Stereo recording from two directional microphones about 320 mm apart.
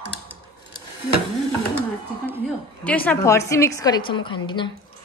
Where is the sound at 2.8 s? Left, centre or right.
Centre.